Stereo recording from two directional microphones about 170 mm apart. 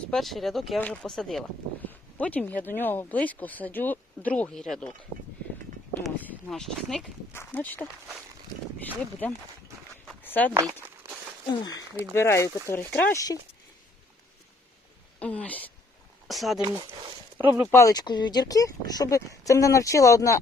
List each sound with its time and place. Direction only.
0.1 s speech: centre (ahead or behind)
10.2 s a sound: 10° left (ahead or behind)
10.5 s a sound: 20° right (ahead or behind)
11.6 s speech: 25° left (ahead or behind)
15.2 s speech: 10° left (ahead or behind)
16.6 s speech: 25° right (ahead or behind)
17.3 s speech: 10° right (ahead or behind)
17.7 s speech: 20° left (ahead or behind)